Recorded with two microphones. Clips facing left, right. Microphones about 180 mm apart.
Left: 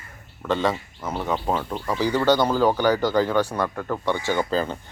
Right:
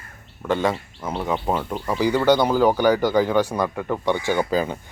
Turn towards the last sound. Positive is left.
turn(degrees=-10)  # may be behind; listen again after turning